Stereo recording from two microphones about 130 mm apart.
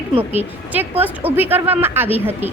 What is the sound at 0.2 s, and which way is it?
Speech, 15° right (ahead or behind).